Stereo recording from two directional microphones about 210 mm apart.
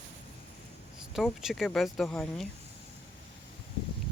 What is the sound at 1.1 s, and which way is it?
Speech, centre (ahead or behind).